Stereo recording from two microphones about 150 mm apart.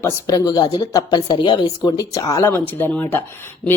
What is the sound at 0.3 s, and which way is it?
A woman's voice, 25° left (ahead or behind).